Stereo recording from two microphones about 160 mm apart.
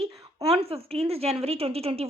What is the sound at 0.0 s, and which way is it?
Speech, 35° right (ahead or behind).